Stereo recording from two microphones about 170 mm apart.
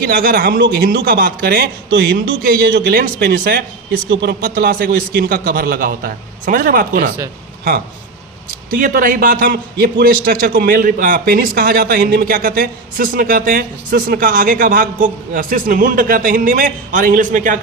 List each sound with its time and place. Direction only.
0.0 s a man's voice: 55° right (ahead or behind)
4.1 s speech: 90° right
4.4 s a man's voice: 55° right (ahead or behind)
8.7 s a man's voice: 55° right (ahead or behind)